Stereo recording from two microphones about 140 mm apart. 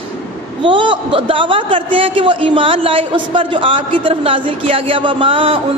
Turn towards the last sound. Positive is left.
turn(degrees=-40)  # may be behind; listen again after turning